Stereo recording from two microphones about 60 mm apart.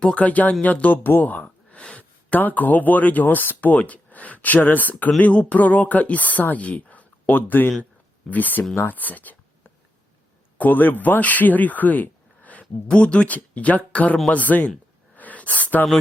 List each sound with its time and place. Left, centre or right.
0.0 s speech: left
10.6 s speech: left
15.1 s a sound: left